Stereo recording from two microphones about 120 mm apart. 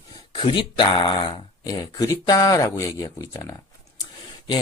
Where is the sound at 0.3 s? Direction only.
45° left (ahead or behind).